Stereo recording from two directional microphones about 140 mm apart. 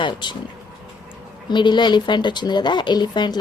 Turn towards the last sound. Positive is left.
turn(degrees=30)  # may be behind; listen again after turning